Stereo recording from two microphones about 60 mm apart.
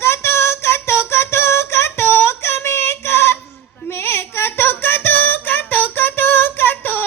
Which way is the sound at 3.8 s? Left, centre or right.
Left.